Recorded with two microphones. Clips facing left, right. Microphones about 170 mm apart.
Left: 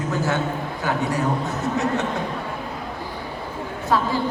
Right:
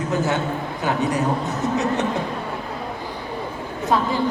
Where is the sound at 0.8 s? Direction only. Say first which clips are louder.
Right 2 dB; 20° right (ahead or behind).